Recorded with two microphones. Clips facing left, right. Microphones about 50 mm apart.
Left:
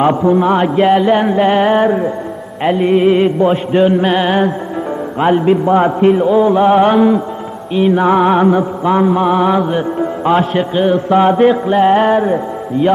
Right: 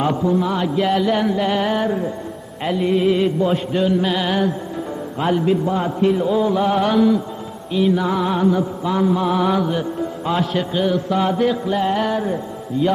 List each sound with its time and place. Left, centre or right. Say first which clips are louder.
0.0 s mantra: left 7 dB; left